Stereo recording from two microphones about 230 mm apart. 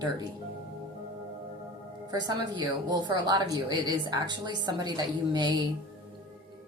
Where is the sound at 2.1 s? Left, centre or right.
Centre.